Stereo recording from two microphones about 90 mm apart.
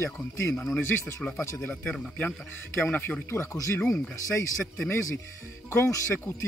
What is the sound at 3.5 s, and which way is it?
Speech, 35° left (ahead or behind).